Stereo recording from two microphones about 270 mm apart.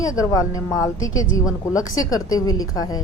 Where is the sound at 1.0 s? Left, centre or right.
Centre.